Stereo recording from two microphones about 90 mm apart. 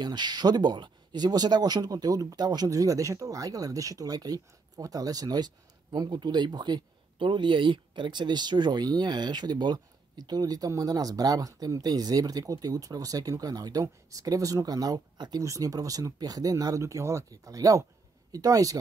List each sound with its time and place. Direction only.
0.0 s speech: 50° right (ahead or behind)